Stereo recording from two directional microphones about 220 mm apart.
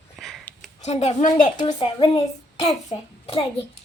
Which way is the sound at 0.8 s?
30° left (ahead or behind).